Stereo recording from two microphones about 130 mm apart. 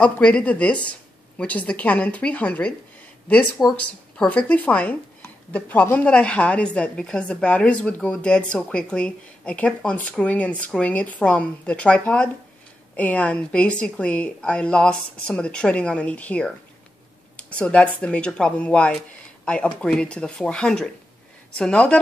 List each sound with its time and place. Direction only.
0.0 s a woman's voice: 10° left (ahead or behind)